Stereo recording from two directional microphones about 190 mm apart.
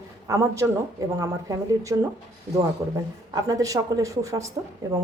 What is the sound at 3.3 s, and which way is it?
A woman's voice, 20° right (ahead or behind).